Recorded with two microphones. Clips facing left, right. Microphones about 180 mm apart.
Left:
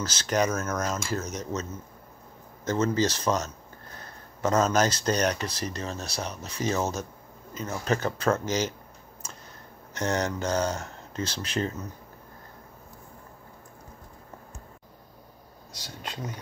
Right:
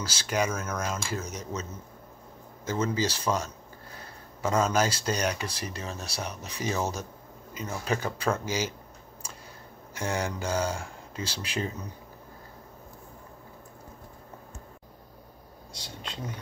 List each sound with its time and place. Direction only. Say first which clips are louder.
0.0 s speech: left 3 dB; 10° right (ahead or behind)
0.8 s cutlery: left 3 dB; 45° left (ahead or behind)
1.2 s speech: left 3 dB; 10° right (ahead or behind)
9.9 s speech: left 3 dB; 10° right (ahead or behind)
15.7 s speech: left 1 dB; 25° right (ahead or behind)